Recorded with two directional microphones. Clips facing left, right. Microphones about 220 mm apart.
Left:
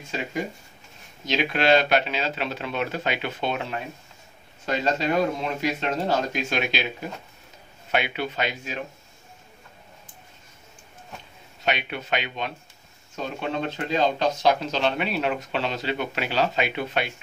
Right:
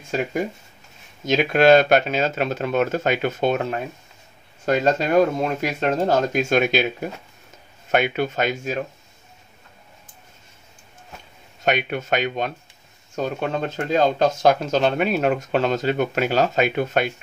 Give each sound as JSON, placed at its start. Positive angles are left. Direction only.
{"t": 1.2, "sound": "speech", "side_deg": -45}
{"t": 7.9, "sound": "speech", "side_deg": -45}
{"t": 11.6, "sound": "speech", "side_deg": -45}